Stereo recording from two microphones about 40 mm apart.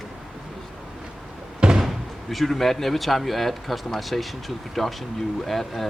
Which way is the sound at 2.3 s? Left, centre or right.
Centre.